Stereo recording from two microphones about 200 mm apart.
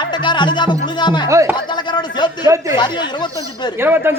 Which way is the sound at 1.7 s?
20° left (ahead or behind).